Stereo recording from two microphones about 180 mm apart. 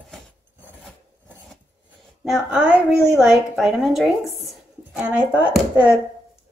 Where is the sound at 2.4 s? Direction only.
5° right (ahead or behind).